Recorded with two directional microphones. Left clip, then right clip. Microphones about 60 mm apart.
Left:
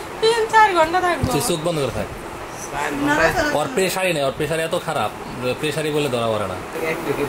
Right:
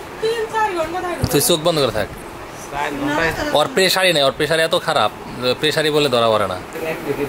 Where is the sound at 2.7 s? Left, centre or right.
Centre.